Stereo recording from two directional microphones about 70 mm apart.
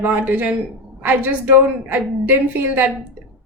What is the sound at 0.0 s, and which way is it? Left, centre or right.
A woman's voice, right.